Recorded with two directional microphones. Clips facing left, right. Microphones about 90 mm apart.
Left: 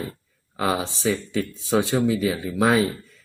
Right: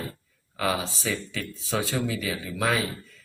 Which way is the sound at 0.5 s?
25° left (ahead or behind).